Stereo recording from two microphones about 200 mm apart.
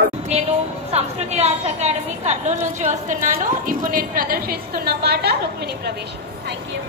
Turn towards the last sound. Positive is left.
turn(degrees=-50)  # may be behind; listen again after turning